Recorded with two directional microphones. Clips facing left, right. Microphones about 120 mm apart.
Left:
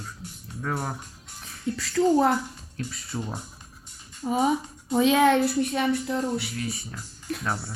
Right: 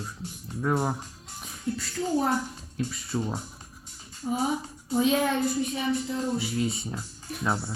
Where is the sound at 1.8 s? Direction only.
90° left.